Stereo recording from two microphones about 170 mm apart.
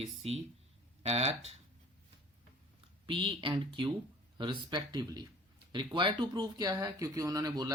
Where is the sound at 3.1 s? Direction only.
30° right (ahead or behind).